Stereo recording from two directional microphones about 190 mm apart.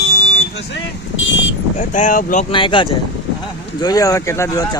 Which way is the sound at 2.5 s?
25° left (ahead or behind).